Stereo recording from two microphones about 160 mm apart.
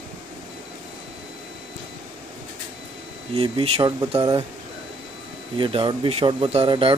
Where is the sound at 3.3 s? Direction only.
35° right (ahead or behind).